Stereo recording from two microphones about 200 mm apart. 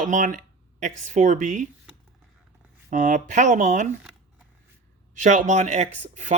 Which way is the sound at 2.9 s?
40° right (ahead or behind).